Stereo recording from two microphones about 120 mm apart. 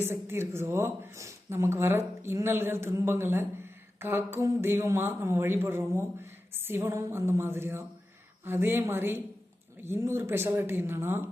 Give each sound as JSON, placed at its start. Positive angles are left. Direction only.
{"t": 0.0, "sound": "speech", "side_deg": -20}